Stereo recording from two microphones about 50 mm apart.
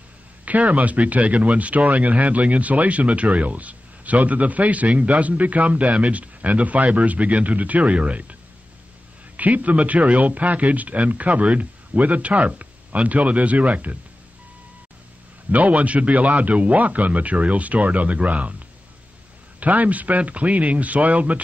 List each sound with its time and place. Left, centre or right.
0.5 s speech: right
9.4 s speech: right
15.5 s speech: right
19.6 s a man's voice: right